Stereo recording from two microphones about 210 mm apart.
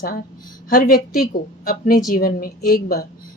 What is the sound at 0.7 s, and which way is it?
A woman's voice, 45° left (ahead or behind).